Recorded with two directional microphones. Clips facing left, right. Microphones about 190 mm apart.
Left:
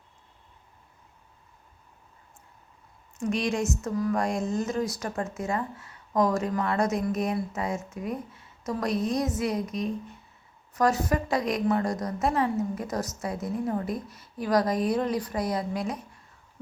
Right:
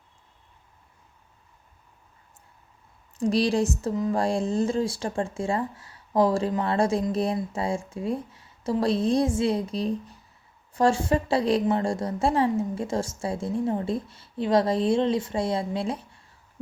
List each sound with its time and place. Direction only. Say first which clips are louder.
3.2 s a woman's voice: right 5 dB; 35° right (ahead or behind)